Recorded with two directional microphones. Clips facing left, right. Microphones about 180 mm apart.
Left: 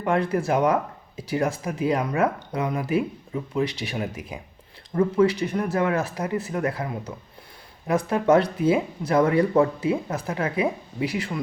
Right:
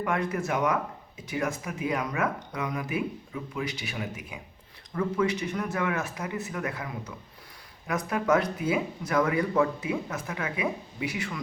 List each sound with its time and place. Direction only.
0.0 s speech: 30° left (ahead or behind)